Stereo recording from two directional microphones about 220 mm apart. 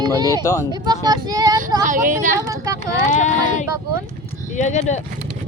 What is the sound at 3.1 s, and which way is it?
Speech, 35° left (ahead or behind).